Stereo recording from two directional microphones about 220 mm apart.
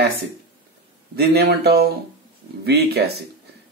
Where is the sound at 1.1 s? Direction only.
45° right (ahead or behind).